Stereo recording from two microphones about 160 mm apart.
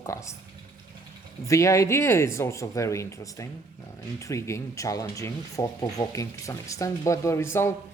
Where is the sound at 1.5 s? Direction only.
20° left (ahead or behind).